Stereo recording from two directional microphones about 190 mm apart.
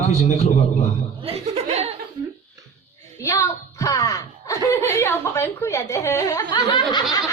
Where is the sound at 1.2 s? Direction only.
30° right (ahead or behind).